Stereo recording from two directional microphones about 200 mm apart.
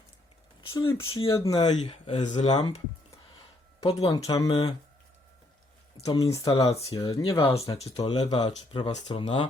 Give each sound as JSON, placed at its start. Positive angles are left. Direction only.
{"t": 0.7, "sound": "speech", "side_deg": 25}
{"t": 3.8, "sound": "speech", "side_deg": 25}
{"t": 6.0, "sound": "speech", "side_deg": 20}
{"t": 6.9, "sound": "speech", "side_deg": 25}